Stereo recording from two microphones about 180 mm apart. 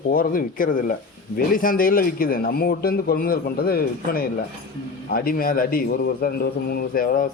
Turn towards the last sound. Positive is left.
turn(degrees=55)  # may be behind; listen again after turning